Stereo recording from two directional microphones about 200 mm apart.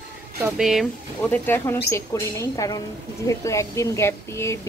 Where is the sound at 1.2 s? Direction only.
10° left (ahead or behind).